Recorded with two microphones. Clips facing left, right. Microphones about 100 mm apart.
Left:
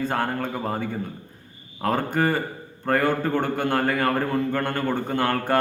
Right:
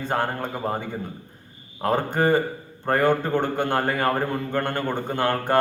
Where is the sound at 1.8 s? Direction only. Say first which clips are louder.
Right 1 dB; 25° right (ahead or behind).